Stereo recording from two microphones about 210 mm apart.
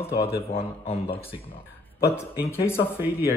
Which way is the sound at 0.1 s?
50° left (ahead or behind).